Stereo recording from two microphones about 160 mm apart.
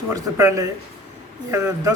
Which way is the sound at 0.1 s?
20° right (ahead or behind).